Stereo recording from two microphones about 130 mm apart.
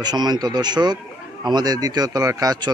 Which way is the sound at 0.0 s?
35° right (ahead or behind).